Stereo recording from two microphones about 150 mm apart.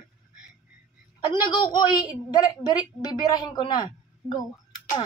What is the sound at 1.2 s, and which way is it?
A woman's voice, 30° left (ahead or behind).